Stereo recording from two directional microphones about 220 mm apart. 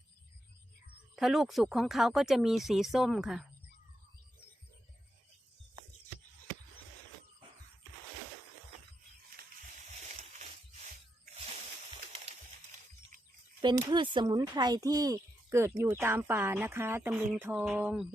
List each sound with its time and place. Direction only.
1.1 s speech: centre (ahead or behind)
9.9 s a sound: 35° right (ahead or behind)
13.6 s speech: 20° right (ahead or behind)